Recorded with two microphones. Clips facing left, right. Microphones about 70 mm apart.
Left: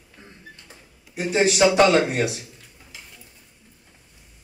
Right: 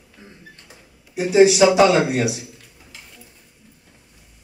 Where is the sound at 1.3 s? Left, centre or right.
Left.